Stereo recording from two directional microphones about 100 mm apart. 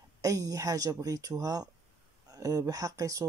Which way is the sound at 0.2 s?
35° right (ahead or behind).